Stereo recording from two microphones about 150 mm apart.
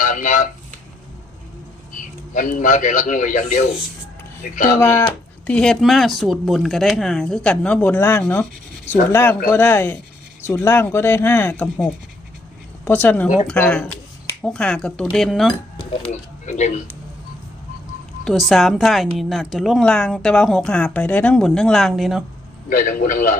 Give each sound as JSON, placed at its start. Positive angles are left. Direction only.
{"t": 0.0, "sound": "a sound", "side_deg": 60}
{"t": 1.9, "sound": "a man's voice", "side_deg": 60}
{"t": 4.8, "sound": "a woman's voice", "side_deg": 15}
{"t": 12.8, "sound": "a woman's voice", "side_deg": 10}
{"t": 16.5, "sound": "speech", "side_deg": 50}
{"t": 18.3, "sound": "a woman's voice", "side_deg": 0}
{"t": 22.7, "sound": "a man's voice", "side_deg": 70}